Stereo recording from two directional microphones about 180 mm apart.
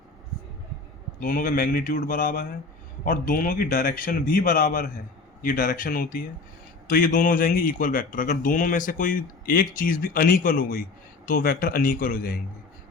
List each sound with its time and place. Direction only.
1.2 s speech: 50° left (ahead or behind)